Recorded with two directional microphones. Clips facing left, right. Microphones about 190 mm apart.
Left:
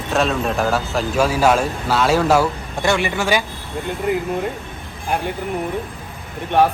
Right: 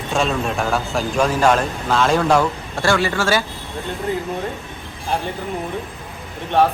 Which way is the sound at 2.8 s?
20° left (ahead or behind).